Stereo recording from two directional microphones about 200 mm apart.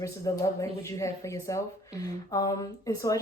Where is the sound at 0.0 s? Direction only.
15° left (ahead or behind).